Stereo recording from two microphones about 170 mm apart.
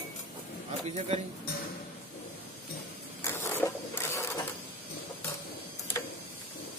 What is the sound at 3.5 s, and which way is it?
Zipper, 15° left (ahead or behind).